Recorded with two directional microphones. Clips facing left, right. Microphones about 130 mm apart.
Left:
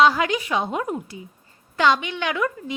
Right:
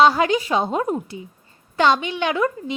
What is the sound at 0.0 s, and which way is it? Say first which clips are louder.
A woman's voice: right 2 dB; 30° right (ahead or behind).